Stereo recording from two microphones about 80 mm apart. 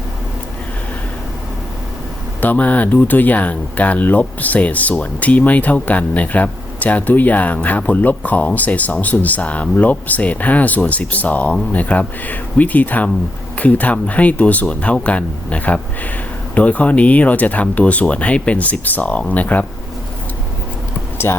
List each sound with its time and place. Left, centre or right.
2.4 s speech: left
21.2 s speech: left